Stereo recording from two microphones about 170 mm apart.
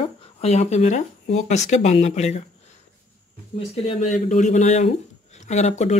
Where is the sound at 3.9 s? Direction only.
45° left (ahead or behind).